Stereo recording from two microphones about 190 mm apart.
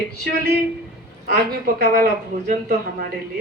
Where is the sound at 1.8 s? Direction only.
50° right (ahead or behind).